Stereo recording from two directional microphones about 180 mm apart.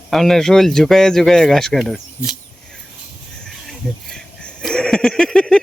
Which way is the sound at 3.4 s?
5° left (ahead or behind).